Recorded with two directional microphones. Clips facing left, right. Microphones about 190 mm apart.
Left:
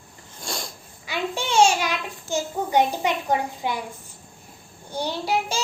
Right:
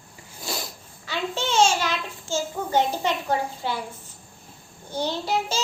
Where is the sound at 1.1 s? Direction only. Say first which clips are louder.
Left 1 dB; 10° left (ahead or behind).